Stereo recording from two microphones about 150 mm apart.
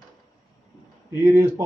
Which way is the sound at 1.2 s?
15° right (ahead or behind).